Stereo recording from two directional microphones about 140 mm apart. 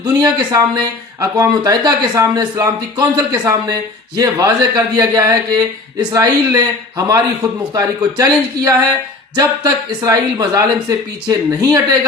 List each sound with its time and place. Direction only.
0.0 s speech: 30° right (ahead or behind)